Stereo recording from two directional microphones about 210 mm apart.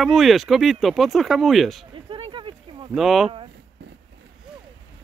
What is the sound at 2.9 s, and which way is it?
Speech, centre (ahead or behind).